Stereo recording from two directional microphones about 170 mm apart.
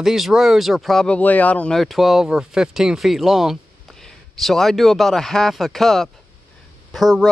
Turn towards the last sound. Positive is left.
turn(degrees=0)  # may be behind; listen again after turning